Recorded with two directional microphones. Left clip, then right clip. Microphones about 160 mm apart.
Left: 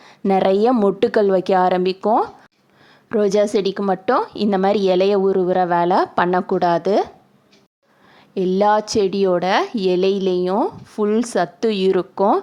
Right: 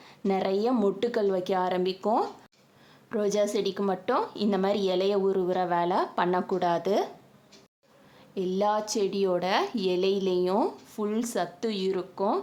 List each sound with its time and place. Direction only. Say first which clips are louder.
0.3 s a woman's voice: left 11 dB; 45° left (ahead or behind)
8.4 s a woman's voice: left 10 dB; 40° left (ahead or behind)